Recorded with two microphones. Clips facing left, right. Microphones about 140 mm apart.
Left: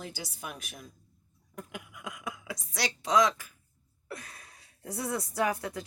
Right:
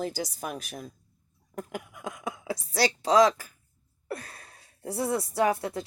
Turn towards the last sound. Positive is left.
turn(degrees=-25)  # may be behind; listen again after turning